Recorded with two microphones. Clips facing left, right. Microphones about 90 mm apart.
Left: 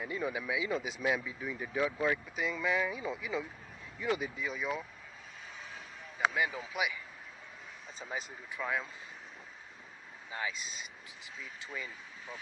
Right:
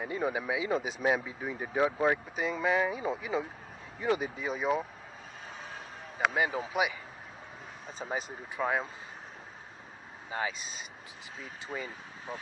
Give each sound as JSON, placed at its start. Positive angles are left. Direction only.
{"t": 0.0, "sound": "speech", "side_deg": -45}
{"t": 5.5, "sound": "vehicle", "side_deg": -45}
{"t": 7.9, "sound": "speech", "side_deg": -40}
{"t": 10.3, "sound": "speech", "side_deg": -40}